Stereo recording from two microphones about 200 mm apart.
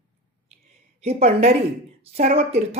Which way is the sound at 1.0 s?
30° right (ahead or behind).